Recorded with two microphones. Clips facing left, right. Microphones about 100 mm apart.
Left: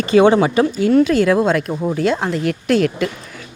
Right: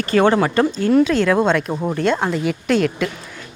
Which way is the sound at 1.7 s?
10° right (ahead or behind).